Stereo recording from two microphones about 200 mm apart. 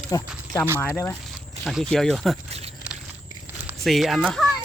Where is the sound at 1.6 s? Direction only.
Centre (ahead or behind).